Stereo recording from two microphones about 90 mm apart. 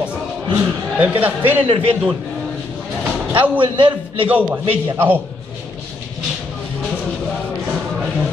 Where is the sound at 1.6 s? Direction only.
85° right.